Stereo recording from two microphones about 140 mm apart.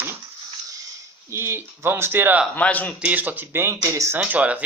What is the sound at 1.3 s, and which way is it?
Speech, 20° right (ahead or behind).